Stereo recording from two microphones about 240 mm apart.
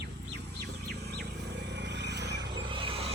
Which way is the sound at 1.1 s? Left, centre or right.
Right.